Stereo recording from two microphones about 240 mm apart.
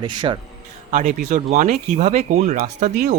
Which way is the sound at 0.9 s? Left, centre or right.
Right.